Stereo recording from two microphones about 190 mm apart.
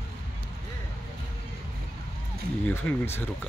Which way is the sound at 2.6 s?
10° left (ahead or behind).